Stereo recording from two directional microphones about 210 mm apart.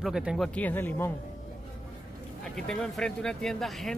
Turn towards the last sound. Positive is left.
turn(degrees=0)  # may be behind; listen again after turning